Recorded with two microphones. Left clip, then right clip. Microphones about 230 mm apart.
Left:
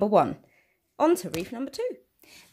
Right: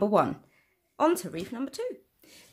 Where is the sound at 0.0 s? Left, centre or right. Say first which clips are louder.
Left 3 dB; centre.